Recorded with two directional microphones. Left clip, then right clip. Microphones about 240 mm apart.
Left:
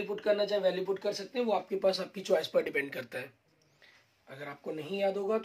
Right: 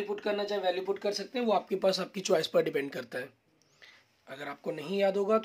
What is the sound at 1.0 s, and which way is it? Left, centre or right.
Speech, right.